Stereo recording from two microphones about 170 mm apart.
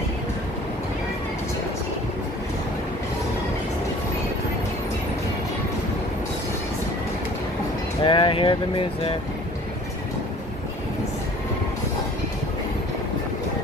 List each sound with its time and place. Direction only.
8.0 s speech: 30° left (ahead or behind)